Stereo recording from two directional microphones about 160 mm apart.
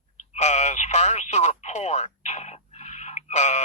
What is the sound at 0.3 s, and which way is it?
Radio, 45° left (ahead or behind).